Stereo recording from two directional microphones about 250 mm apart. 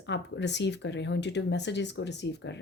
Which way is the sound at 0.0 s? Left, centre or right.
Left.